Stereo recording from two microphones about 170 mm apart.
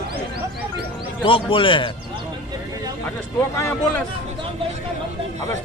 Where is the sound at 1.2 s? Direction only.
30° left (ahead or behind).